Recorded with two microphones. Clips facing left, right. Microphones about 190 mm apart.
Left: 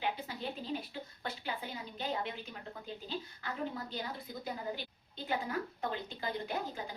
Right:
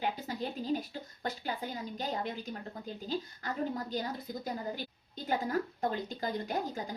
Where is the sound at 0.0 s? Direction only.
40° right (ahead or behind).